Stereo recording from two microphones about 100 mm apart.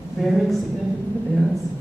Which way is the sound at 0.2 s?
Centre (ahead or behind).